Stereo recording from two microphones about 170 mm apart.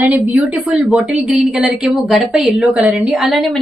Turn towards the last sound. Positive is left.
turn(degrees=0)  # may be behind; listen again after turning